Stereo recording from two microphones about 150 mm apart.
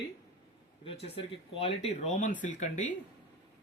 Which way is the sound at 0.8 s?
40° left (ahead or behind).